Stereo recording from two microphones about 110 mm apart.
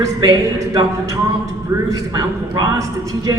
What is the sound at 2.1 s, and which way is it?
A man's voice, 40° right (ahead or behind).